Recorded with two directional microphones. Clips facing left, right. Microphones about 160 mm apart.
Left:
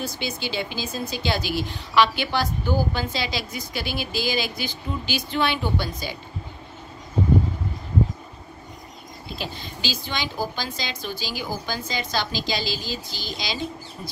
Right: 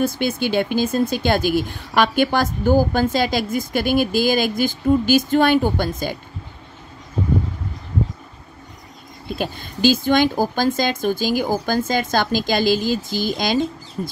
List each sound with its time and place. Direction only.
0.0 s speech: 55° right (ahead or behind)
9.4 s speech: 50° right (ahead or behind)